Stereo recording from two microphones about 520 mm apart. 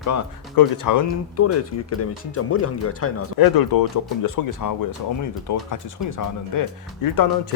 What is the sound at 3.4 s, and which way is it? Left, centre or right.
Speech, left.